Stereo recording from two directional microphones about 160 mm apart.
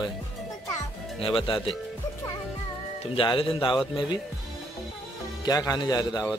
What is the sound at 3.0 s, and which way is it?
Speech, 30° left (ahead or behind).